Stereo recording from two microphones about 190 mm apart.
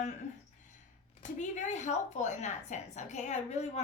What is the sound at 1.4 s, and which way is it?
A woman's voice, 40° left (ahead or behind).